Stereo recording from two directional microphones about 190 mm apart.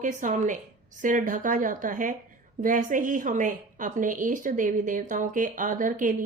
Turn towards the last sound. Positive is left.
turn(degrees=-45)  # may be behind; listen again after turning